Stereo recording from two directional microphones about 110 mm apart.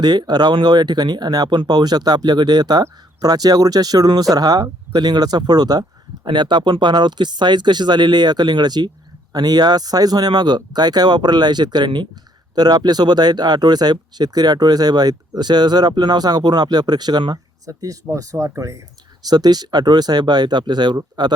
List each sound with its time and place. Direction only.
0.0 s speech: 40° right (ahead or behind)